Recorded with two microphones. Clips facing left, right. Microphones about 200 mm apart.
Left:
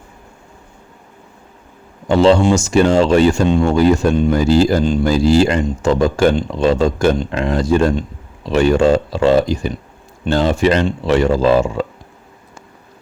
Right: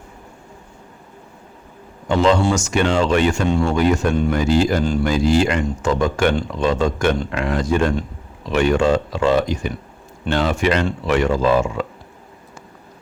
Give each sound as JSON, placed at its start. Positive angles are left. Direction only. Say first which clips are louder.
{"t": 2.0, "sound": "speech", "louder": "left 5 dB", "side_deg": 30}
{"t": 4.8, "sound": "speech", "louder": "left 4 dB", "side_deg": 20}
{"t": 5.0, "sound": "speech", "louder": "left 4 dB", "side_deg": 30}